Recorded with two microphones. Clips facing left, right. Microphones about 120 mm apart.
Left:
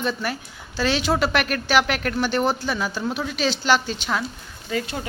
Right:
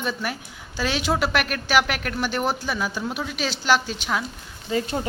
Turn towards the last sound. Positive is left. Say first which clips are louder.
# right 2 dB
turn(degrees=-30)  # may be behind; listen again after turning